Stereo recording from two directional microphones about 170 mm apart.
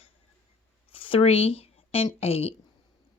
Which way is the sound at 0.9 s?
30° left (ahead or behind).